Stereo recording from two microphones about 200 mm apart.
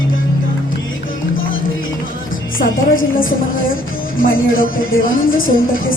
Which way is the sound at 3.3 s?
45° left (ahead or behind).